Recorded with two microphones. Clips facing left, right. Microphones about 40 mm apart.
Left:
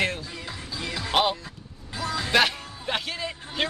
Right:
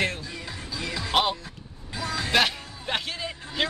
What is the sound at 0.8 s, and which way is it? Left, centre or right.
Speech, left.